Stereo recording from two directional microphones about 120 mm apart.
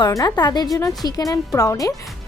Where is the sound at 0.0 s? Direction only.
30° left (ahead or behind).